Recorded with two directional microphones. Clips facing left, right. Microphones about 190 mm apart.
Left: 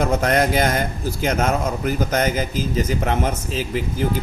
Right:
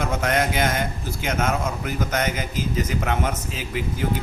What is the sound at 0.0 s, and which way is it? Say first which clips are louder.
A man's voice: left 4 dB; 35° left (ahead or behind).